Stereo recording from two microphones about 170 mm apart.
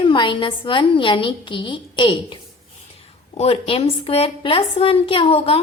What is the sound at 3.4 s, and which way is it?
A woman's voice, 35° left (ahead or behind).